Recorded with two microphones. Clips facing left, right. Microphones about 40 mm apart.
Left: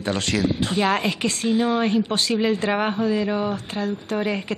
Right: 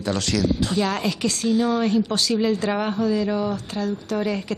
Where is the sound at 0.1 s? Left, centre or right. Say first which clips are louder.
Even; left.